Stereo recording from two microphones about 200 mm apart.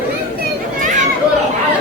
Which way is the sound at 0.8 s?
40° right (ahead or behind).